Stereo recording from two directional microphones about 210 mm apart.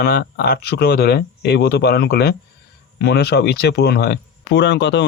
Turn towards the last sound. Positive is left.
turn(degrees=55)  # may be behind; listen again after turning